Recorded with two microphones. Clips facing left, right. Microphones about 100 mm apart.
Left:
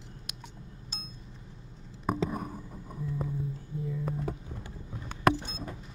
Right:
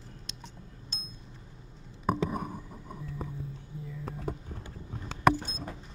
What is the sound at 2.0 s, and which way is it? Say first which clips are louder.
Whispering: right 1 dB; centre (ahead or behind).